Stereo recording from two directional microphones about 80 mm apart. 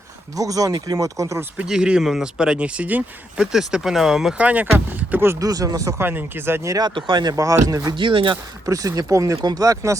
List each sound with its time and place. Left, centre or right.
0.3 s speech: right
1.6 s speech: centre
4.4 s speech: right
5.4 s speech: right
6.0 s speech: right
6.7 s speech: right
6.9 s speech: right
7.3 s speech: right
7.9 s speech: right
8.6 s speech: right